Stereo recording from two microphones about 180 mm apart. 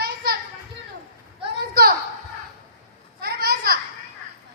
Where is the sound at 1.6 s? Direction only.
60° right (ahead or behind).